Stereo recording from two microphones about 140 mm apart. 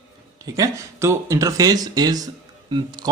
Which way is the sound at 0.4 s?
25° right (ahead or behind).